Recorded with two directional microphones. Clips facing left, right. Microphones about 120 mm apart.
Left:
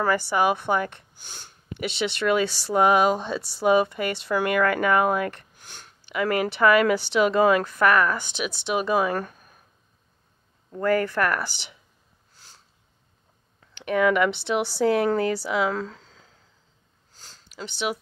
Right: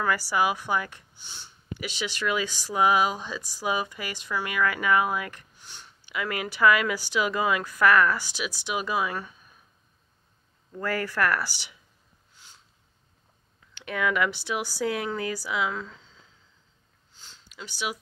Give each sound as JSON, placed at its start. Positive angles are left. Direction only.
{"t": 0.0, "sound": "speech", "side_deg": 25}
{"t": 1.1, "sound": "speech", "side_deg": 50}
{"t": 1.9, "sound": "speech", "side_deg": 30}
{"t": 4.3, "sound": "speech", "side_deg": 50}
{"t": 5.6, "sound": "a sound", "side_deg": 50}
{"t": 6.7, "sound": "speech", "side_deg": 45}
{"t": 7.6, "sound": "speech", "side_deg": 25}
{"t": 8.9, "sound": "speech", "side_deg": 45}
{"t": 10.7, "sound": "speech", "side_deg": 20}
{"t": 12.4, "sound": "a sound", "side_deg": 35}
{"t": 14.1, "sound": "speech", "side_deg": 25}
{"t": 15.0, "sound": "speech", "side_deg": 50}
{"t": 17.1, "sound": "sniff", "side_deg": 40}
{"t": 17.6, "sound": "speech", "side_deg": 25}